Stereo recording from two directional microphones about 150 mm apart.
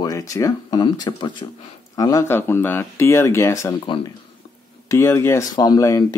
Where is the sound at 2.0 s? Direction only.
20° left (ahead or behind).